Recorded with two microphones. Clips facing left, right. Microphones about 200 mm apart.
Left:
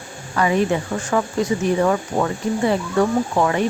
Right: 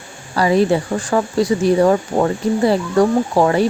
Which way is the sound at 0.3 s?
35° right (ahead or behind).